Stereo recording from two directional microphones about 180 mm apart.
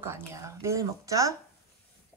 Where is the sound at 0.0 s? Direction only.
15° right (ahead or behind).